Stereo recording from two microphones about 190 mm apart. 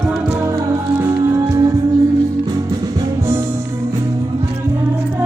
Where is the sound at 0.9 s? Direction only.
15° right (ahead or behind).